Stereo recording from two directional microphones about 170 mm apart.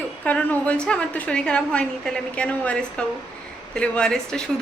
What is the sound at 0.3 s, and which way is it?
A woman's voice, 10° left (ahead or behind).